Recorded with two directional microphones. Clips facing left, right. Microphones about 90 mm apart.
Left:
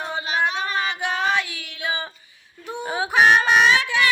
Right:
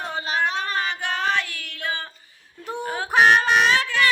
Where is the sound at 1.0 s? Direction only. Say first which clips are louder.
Left 2 dB; 10° left (ahead or behind).